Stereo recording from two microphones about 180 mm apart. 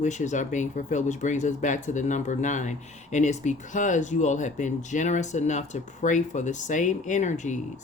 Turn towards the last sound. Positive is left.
turn(degrees=40)  # may be behind; listen again after turning